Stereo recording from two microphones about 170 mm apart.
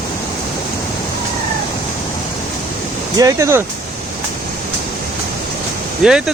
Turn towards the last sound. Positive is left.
turn(degrees=-5)  # may be behind; listen again after turning